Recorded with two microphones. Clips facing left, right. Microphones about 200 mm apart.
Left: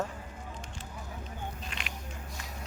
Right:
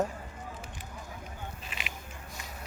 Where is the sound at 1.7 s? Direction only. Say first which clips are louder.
Even; 5° right (ahead or behind).